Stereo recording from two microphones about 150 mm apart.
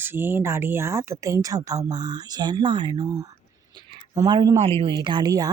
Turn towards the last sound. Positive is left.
turn(degrees=-25)  # may be behind; listen again after turning